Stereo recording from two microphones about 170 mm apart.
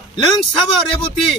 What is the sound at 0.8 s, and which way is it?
Speech, 30° left (ahead or behind).